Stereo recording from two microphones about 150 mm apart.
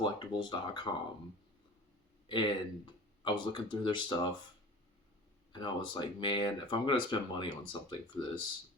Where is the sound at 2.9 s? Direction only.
30° left (ahead or behind).